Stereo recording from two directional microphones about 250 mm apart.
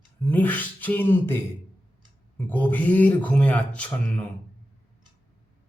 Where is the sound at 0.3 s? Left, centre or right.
Centre.